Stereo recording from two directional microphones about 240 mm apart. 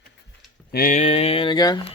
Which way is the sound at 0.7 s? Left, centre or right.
Left.